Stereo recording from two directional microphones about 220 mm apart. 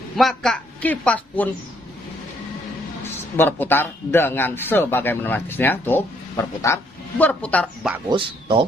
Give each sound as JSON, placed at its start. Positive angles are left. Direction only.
{"t": 0.2, "sound": "a man's voice", "side_deg": 0}
{"t": 3.3, "sound": "a man's voice", "side_deg": 10}
{"t": 8.1, "sound": "speech", "side_deg": -20}